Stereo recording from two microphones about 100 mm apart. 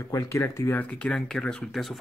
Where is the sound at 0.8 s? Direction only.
15° left (ahead or behind).